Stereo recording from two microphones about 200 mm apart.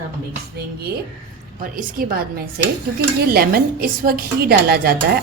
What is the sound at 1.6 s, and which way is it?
A woman's voice, 45° right (ahead or behind).